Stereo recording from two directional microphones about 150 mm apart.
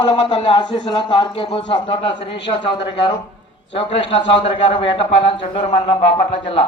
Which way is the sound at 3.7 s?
35° left (ahead or behind).